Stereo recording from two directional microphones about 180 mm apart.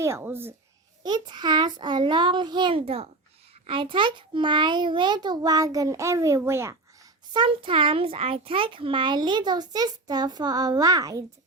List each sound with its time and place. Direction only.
0.0 s speech: 15° right (ahead or behind)
1.0 s a child's voice: 25° right (ahead or behind)
7.4 s a child's voice: 30° right (ahead or behind)